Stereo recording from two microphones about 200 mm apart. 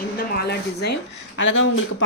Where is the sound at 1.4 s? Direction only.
70° left (ahead or behind).